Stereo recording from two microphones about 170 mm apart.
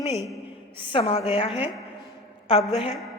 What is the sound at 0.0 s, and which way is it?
A woman's voice, 40° left (ahead or behind).